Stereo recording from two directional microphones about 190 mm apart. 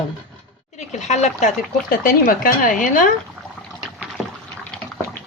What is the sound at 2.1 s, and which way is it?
Speech, 50° left (ahead or behind).